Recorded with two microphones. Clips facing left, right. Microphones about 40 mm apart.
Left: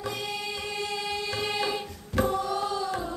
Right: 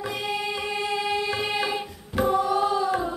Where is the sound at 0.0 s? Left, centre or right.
Centre.